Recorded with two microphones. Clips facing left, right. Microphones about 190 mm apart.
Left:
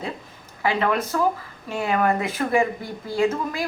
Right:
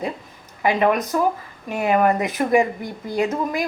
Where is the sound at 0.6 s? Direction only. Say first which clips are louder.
Right 4 dB; 15° right (ahead or behind).